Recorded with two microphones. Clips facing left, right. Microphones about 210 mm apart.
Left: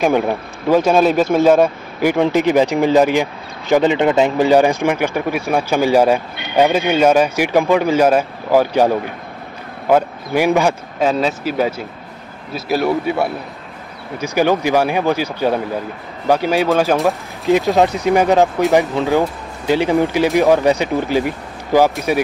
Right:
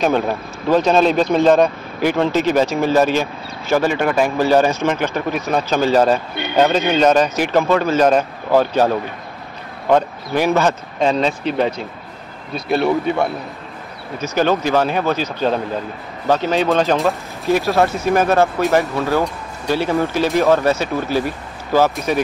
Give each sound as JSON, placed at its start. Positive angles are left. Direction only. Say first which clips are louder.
{"t": 0.0, "sound": "speech", "louder": "left 2 dB", "side_deg": 10}